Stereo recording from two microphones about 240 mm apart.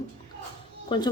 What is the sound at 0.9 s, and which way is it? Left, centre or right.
Speech, centre.